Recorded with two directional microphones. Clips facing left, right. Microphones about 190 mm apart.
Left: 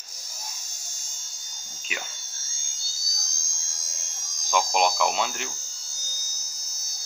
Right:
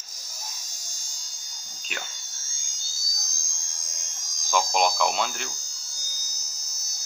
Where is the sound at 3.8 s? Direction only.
15° right (ahead or behind).